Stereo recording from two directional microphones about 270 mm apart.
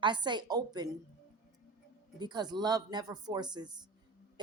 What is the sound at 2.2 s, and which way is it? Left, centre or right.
A woman's voice, centre.